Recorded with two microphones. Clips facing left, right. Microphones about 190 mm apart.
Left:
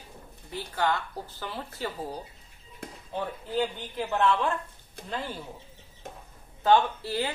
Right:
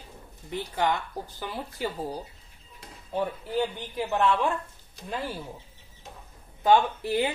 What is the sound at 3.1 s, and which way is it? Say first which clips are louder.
Speech: right 2 dB; 15° right (ahead or behind).